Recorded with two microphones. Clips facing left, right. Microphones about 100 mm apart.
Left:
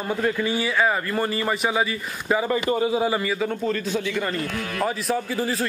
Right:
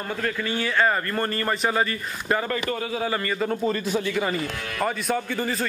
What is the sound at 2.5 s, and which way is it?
A man's voice, 20° left (ahead or behind).